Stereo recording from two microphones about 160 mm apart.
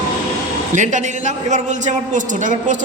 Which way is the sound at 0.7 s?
50° right (ahead or behind).